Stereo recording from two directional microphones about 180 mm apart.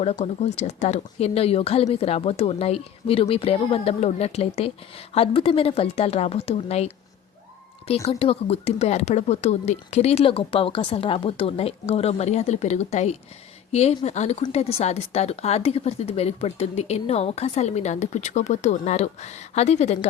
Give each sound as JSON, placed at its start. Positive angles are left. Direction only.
{"t": 0.0, "sound": "speech", "side_deg": 35}